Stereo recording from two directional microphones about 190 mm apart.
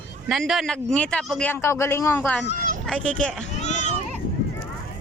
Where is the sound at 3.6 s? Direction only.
40° left (ahead or behind).